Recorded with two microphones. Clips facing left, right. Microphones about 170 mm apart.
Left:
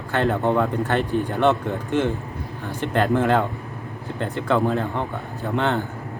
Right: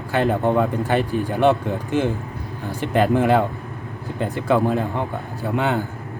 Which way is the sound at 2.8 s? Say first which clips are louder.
Right 2 dB; 10° right (ahead or behind).